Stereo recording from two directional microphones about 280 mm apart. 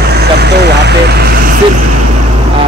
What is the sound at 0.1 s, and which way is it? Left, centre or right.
Vehicle, right.